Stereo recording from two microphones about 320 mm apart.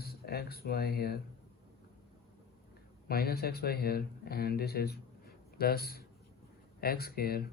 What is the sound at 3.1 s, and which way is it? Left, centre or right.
Speech, left.